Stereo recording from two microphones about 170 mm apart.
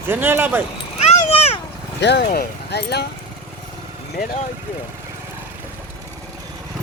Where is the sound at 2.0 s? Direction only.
80° left.